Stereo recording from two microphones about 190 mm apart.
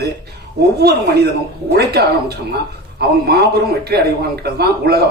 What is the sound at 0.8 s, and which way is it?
A man's voice, 60° right (ahead or behind).